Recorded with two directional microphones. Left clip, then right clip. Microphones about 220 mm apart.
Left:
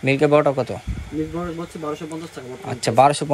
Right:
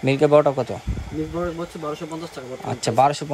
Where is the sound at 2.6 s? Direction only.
15° right (ahead or behind).